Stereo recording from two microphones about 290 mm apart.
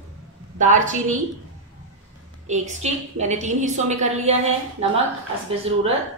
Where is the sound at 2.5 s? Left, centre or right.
Right.